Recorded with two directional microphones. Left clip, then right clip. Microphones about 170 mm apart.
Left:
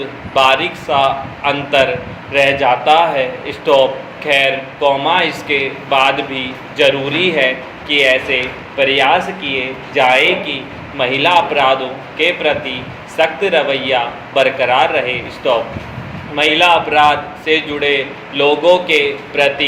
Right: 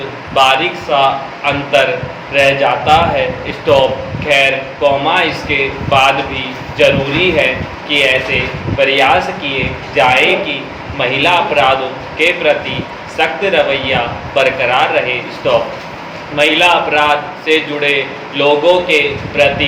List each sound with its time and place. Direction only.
0.3 s a man's voice: 45° left (ahead or behind)